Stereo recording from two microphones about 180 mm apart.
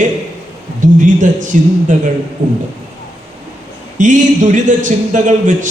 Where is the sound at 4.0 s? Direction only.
45° right (ahead or behind).